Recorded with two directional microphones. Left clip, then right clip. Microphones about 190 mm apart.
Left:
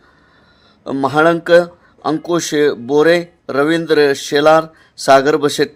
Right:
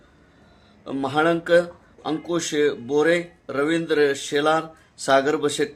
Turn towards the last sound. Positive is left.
turn(degrees=45)  # may be behind; listen again after turning